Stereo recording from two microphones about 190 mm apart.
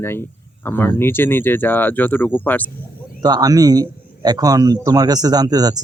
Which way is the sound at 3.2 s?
20° right (ahead or behind).